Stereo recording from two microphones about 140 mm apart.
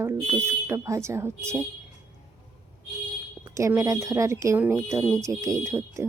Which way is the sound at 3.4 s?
25° right (ahead or behind).